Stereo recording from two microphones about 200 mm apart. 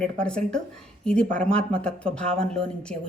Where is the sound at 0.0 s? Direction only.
5° left (ahead or behind).